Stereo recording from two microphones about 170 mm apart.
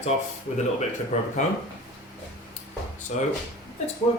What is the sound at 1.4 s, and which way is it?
Speech, 45° left (ahead or behind).